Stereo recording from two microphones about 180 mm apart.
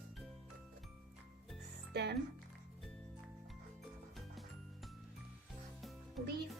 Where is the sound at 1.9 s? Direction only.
70° right (ahead or behind).